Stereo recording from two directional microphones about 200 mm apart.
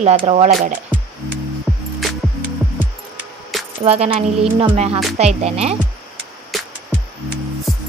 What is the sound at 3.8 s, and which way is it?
Speech, 30° right (ahead or behind).